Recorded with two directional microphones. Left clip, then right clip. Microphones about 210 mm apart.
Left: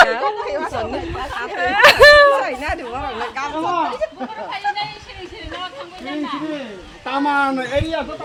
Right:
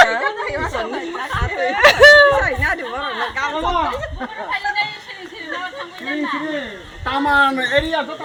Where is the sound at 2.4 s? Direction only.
60° left (ahead or behind).